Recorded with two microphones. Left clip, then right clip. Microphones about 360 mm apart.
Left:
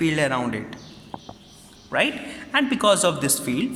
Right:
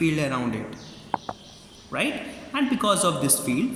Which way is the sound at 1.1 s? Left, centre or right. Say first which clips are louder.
Right 9 dB; right.